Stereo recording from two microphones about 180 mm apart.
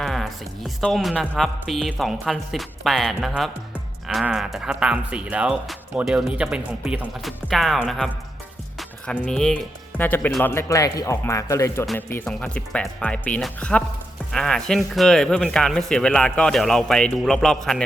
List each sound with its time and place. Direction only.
0.0 s speech: centre (ahead or behind)